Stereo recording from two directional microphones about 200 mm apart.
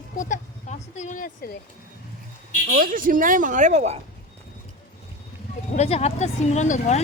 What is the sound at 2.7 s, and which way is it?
A woman's voice, 45° right (ahead or behind).